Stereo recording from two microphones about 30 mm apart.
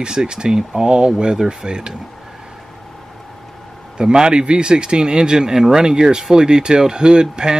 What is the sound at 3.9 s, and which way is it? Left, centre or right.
Speech, right.